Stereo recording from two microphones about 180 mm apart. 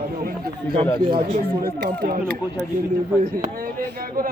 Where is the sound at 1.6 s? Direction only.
65° right (ahead or behind).